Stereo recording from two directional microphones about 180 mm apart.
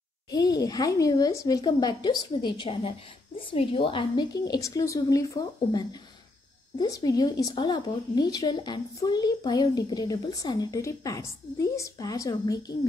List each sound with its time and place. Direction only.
0.3 s speech: 20° left (ahead or behind)